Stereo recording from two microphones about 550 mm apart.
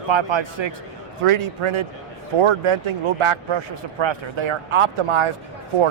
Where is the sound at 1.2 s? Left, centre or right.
Right.